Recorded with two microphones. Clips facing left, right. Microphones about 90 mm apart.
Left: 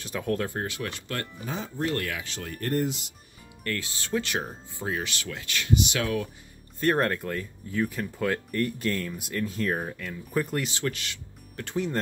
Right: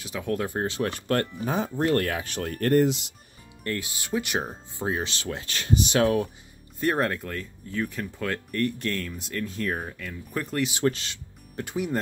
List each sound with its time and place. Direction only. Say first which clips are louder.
0.0 s speech: even; 5° right (ahead or behind)
0.6 s speech: right 5 dB; 25° right (ahead or behind)
1.4 s speech: right 7 dB; 55° right (ahead or behind)
2.0 s speech: right 6 dB; 40° right (ahead or behind)
2.3 s speech: right 8 dB; 55° right (ahead or behind)
3.6 s speech: right 1 dB; 20° right (ahead or behind)
6.8 s speech: left 1 dB; 10° right (ahead or behind)
7.2 s speech: left 2 dB; 5° left (ahead or behind)
10.7 s music: right 6 dB; 25° right (ahead or behind)
11.6 s speech: right 1 dB; 10° right (ahead or behind)